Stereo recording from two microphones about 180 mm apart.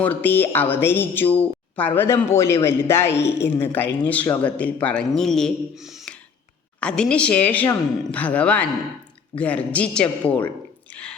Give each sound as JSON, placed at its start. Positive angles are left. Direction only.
{"t": 0.0, "sound": "speech", "side_deg": 10}
{"t": 3.1, "sound": "speech", "side_deg": 70}
{"t": 3.4, "sound": "speech", "side_deg": 10}